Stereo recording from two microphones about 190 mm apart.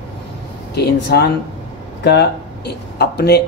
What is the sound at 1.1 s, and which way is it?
Speech, 55° left (ahead or behind).